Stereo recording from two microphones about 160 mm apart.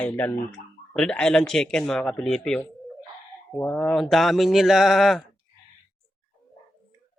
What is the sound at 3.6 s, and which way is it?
Speech, 10° left (ahead or behind).